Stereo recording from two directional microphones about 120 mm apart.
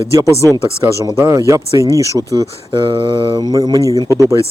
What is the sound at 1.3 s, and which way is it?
Speech, 25° right (ahead or behind).